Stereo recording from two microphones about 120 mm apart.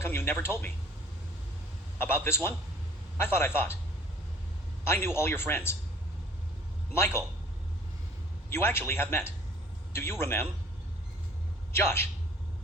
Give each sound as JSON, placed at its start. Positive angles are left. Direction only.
{"t": 0.0, "sound": "a man's voice", "side_deg": 20}
{"t": 2.0, "sound": "a man's voice", "side_deg": 20}
{"t": 4.9, "sound": "a man's voice", "side_deg": 20}
{"t": 6.9, "sound": "a man's voice", "side_deg": 20}
{"t": 8.4, "sound": "a man's voice", "side_deg": 20}
{"t": 11.7, "sound": "a man's voice", "side_deg": 20}